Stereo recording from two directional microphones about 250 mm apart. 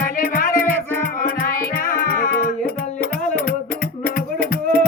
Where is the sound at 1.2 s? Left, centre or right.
Left.